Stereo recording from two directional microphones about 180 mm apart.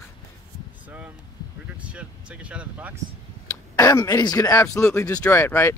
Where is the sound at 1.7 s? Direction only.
5° right (ahead or behind).